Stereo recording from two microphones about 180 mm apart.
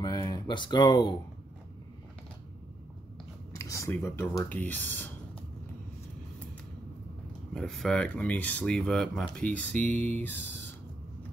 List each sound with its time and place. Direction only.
0.0 s speech: 25° left (ahead or behind)
3.5 s speech: 15° left (ahead or behind)
7.5 s speech: centre (ahead or behind)